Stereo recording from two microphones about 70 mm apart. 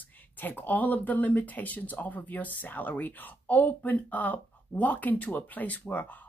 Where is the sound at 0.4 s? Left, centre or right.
Left.